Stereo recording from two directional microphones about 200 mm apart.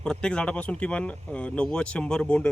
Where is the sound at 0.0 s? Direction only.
5° left (ahead or behind).